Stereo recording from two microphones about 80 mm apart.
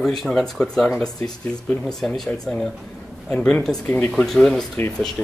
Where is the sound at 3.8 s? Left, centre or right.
Left.